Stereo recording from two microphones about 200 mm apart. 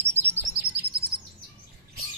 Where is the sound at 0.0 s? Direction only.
10° right (ahead or behind).